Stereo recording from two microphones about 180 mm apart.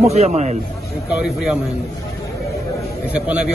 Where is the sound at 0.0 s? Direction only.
35° right (ahead or behind).